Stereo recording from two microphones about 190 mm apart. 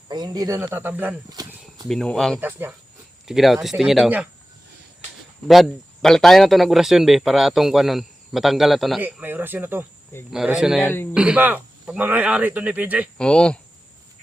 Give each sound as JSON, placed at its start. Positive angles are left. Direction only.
{"t": 0.1, "sound": "speech", "side_deg": -20}
{"t": 1.9, "sound": "a man's voice", "side_deg": 5}
{"t": 2.4, "sound": "a man's voice", "side_deg": -10}
{"t": 5.5, "sound": "a man's voice", "side_deg": 0}
{"t": 10.8, "sound": "speech", "side_deg": 10}
{"t": 11.1, "sound": "a man's voice", "side_deg": -5}
{"t": 13.1, "sound": "a man's voice", "side_deg": 5}